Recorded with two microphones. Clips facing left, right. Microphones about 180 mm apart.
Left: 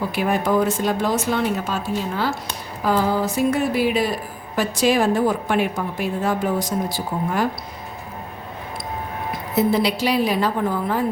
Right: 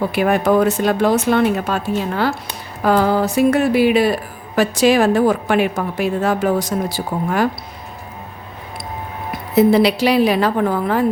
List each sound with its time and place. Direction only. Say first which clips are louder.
0.1 s speech: right 4 dB; 65° right (ahead or behind)
9.6 s speech: right 7 dB; 75° right (ahead or behind)